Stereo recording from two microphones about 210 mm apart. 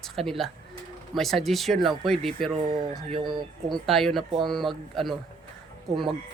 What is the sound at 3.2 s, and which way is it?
Speech, 20° right (ahead or behind).